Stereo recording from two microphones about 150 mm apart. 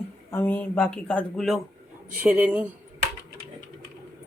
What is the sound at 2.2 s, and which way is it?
Speech, 10° right (ahead or behind).